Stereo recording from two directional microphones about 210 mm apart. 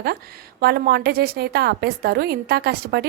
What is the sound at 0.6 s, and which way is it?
A woman's voice, 50° right (ahead or behind).